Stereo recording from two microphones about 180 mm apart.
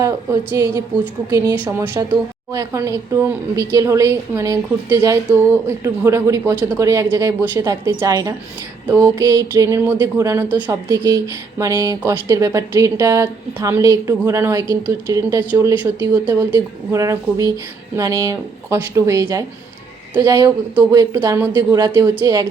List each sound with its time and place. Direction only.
0.0 s a woman's voice: 20° right (ahead or behind)